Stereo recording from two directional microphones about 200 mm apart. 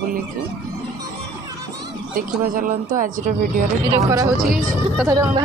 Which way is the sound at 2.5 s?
40° right (ahead or behind).